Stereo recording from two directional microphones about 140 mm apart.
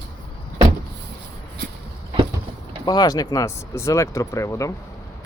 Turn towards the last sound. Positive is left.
turn(degrees=20)  # may be behind; listen again after turning